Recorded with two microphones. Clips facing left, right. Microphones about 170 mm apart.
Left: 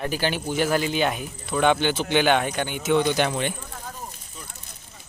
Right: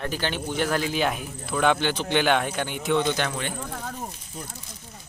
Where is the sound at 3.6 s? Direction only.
60° right (ahead or behind).